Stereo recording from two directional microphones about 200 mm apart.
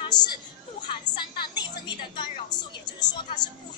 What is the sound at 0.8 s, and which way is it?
A woman's voice, 25° left (ahead or behind).